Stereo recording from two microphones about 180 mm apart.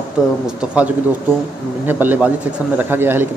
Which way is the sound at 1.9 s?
10° right (ahead or behind).